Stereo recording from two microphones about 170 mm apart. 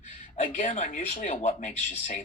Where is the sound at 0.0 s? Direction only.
50° left (ahead or behind).